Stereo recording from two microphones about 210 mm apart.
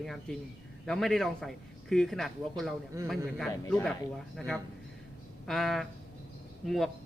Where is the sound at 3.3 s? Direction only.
Centre (ahead or behind).